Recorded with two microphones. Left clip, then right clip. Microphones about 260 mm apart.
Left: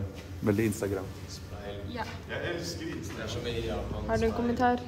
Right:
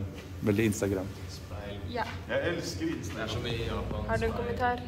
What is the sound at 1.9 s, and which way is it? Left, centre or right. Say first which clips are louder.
Speech: right 7 dB; centre.